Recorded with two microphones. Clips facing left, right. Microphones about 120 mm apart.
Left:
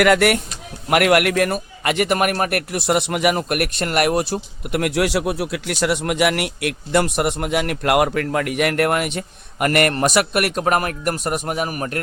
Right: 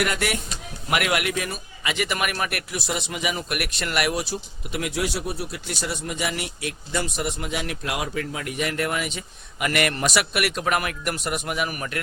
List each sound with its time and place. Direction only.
0.0 s speech: 75° left (ahead or behind)
0.9 s a man's voice: 60° left (ahead or behind); by 11.9 s 40° left (ahead or behind)